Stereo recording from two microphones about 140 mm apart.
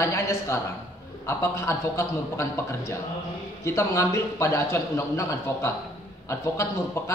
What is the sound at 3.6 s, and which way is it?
A man's voice, 20° left (ahead or behind).